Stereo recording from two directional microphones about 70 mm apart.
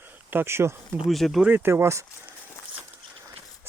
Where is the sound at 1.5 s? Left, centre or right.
Right.